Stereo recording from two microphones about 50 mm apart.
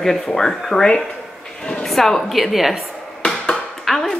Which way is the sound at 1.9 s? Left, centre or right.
Centre.